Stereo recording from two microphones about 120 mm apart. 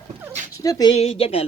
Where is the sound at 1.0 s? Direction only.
50° left (ahead or behind).